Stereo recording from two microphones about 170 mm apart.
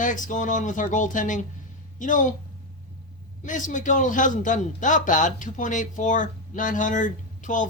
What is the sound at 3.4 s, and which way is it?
Speech, 50° left (ahead or behind).